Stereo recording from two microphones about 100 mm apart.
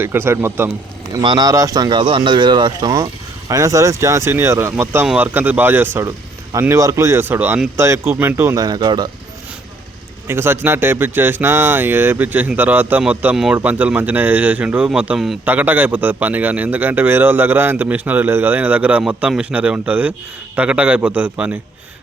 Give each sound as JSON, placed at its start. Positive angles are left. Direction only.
{"t": 0.0, "sound": "a man's voice", "side_deg": -25}
{"t": 1.2, "sound": "speech", "side_deg": -50}
{"t": 1.5, "sound": "speech", "side_deg": -35}
{"t": 3.5, "sound": "a man's voice", "side_deg": -35}
{"t": 8.5, "sound": "speech", "side_deg": -45}
{"t": 10.2, "sound": "a man's voice", "side_deg": -25}
{"t": 13.3, "sound": "speech", "side_deg": -5}
{"t": 13.6, "sound": "speech", "side_deg": -20}
{"t": 15.4, "sound": "a man's voice", "side_deg": -20}